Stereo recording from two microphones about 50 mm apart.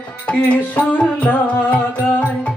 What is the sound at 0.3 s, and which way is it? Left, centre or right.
Music, left.